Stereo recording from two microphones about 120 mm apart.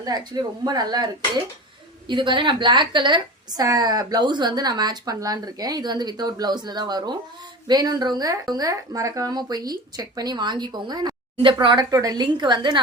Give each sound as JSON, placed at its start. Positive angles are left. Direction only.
{"t": 0.0, "sound": "a woman's voice", "side_deg": -35}